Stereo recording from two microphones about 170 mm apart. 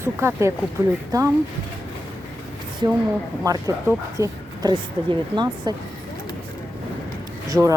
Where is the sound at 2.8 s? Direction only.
25° right (ahead or behind).